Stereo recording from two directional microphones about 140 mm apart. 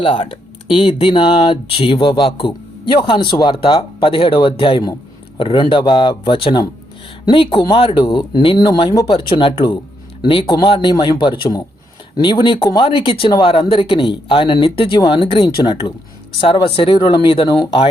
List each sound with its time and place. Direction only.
0.0 s speech: 35° left (ahead or behind)